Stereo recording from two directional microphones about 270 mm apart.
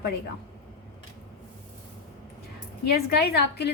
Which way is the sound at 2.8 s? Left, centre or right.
Left.